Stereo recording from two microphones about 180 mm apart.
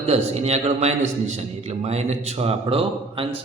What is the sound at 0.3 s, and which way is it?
A man's voice, 35° right (ahead or behind).